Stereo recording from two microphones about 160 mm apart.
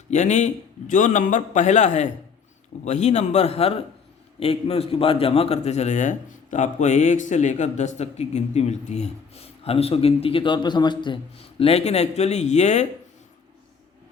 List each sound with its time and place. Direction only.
0.1 s a man's voice: 45° left (ahead or behind); by 11.2 s 30° left (ahead or behind)
11.6 s a man's voice: 40° left (ahead or behind)